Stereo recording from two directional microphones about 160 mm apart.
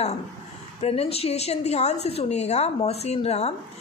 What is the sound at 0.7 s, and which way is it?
A woman's voice, 40° left (ahead or behind).